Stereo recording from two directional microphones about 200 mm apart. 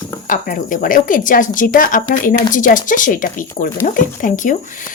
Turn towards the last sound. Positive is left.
turn(degrees=40)  # may be behind; listen again after turning